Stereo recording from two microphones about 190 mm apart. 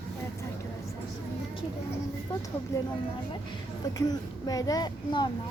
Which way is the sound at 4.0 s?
20° left (ahead or behind).